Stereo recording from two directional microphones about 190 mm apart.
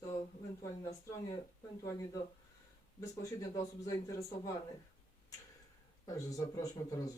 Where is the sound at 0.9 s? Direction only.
15° left (ahead or behind).